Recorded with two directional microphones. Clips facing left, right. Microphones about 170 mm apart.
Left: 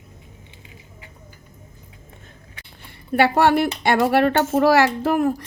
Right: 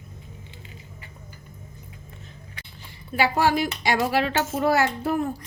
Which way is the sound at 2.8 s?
60° left (ahead or behind).